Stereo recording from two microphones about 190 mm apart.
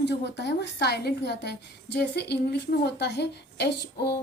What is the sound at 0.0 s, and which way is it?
A woman's voice, 65° left (ahead or behind).